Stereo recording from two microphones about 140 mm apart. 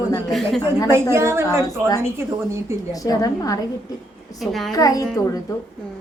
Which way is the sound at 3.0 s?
25° left (ahead or behind).